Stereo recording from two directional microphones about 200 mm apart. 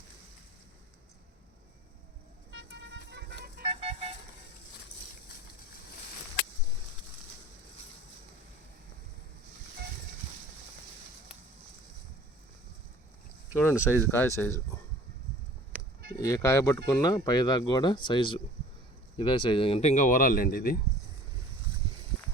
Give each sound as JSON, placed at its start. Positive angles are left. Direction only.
{"t": 2.5, "sound": "vehicle", "side_deg": -65}
{"t": 3.6, "sound": "vehicle", "side_deg": -30}
{"t": 13.5, "sound": "speech", "side_deg": 10}
{"t": 16.2, "sound": "speech", "side_deg": 15}